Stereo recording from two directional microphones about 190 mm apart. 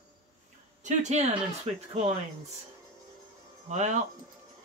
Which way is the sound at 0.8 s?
35° right (ahead or behind).